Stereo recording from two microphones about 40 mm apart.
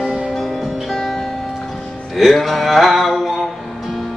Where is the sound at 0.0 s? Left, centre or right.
Centre.